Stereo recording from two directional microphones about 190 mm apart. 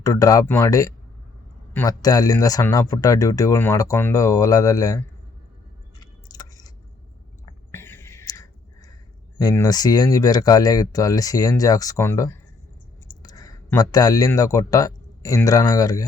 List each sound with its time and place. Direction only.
0.0 s speech: 15° left (ahead or behind)
6.0 s squish: 20° left (ahead or behind)
7.7 s whispering: 10° left (ahead or behind)
9.4 s speech: 20° left (ahead or behind)